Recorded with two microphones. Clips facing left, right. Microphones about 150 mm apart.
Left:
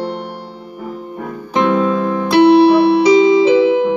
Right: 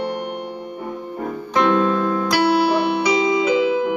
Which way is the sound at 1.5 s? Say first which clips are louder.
Left 3 dB; 20° left (ahead or behind).